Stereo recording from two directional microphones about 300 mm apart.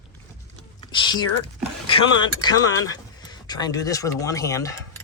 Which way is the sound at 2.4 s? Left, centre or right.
Centre.